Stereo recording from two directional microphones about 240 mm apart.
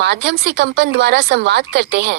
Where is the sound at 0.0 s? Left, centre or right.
Right.